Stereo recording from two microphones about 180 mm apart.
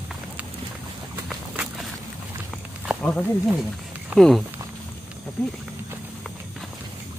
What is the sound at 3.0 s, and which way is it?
Speech, 5° left (ahead or behind).